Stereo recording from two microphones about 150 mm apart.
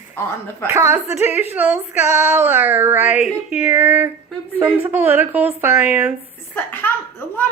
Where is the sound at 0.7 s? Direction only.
15° right (ahead or behind).